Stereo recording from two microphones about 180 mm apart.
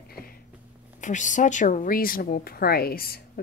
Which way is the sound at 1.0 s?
45° left (ahead or behind).